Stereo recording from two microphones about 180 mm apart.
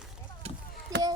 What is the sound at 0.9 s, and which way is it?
Chop, 20° right (ahead or behind).